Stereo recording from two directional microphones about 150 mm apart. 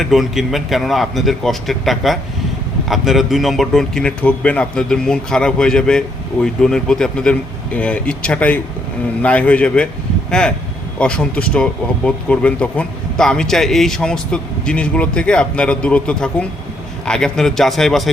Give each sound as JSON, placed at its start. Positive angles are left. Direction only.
{"t": 0.0, "sound": "a man's voice", "side_deg": 0}